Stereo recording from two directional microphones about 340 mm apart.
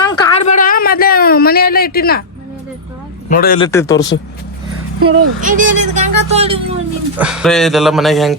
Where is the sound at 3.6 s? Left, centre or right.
Centre.